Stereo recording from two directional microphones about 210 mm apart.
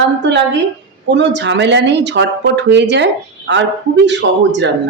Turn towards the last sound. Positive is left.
turn(degrees=-55)  # may be behind; listen again after turning